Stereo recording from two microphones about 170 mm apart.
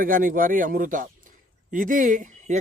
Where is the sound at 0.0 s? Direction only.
55° right (ahead or behind).